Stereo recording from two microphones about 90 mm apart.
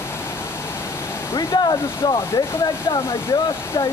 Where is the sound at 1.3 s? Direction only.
50° left (ahead or behind).